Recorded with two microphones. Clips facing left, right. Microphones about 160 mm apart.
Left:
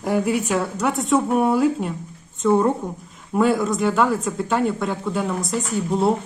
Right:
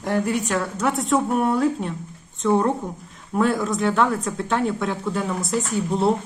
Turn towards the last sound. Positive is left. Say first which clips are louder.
# left 1 dB
turn(degrees=0)  # may be behind; listen again after turning